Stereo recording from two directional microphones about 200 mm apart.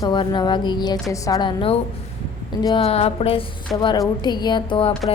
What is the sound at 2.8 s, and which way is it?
Music, 30° left (ahead or behind).